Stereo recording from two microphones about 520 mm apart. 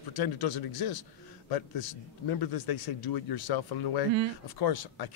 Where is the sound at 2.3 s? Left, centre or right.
Left.